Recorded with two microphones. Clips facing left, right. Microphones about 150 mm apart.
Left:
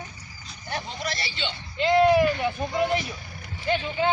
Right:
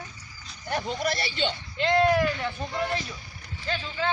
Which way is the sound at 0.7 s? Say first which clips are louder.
Right 4 dB; 50° right (ahead or behind).